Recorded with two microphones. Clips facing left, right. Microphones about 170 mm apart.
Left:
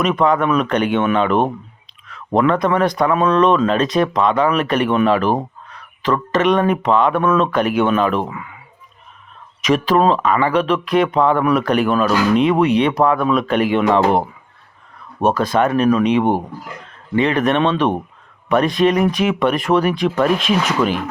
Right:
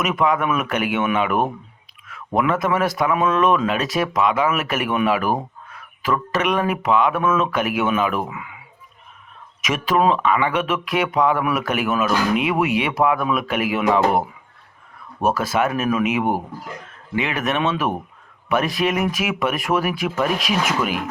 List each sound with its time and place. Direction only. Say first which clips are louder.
0.0 s speech: left 4 dB; 5° right (ahead or behind)
9.9 s speech: left 2 dB; 15° left (ahead or behind)
10.4 s speech: left 5 dB; 5° right (ahead or behind)
15.2 s speech: left 4 dB; 5° right (ahead or behind)